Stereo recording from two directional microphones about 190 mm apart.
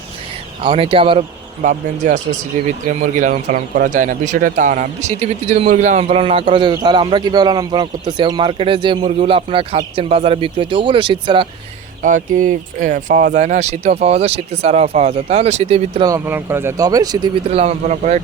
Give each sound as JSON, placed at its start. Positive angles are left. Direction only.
{"t": 0.6, "sound": "speech", "side_deg": -30}
{"t": 1.6, "sound": "speech", "side_deg": -40}
{"t": 12.0, "sound": "speech", "side_deg": -45}
{"t": 16.0, "sound": "speech", "side_deg": -15}
{"t": 17.5, "sound": "speech", "side_deg": -35}